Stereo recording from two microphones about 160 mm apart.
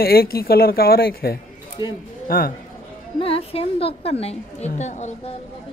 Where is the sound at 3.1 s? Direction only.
35° left (ahead or behind).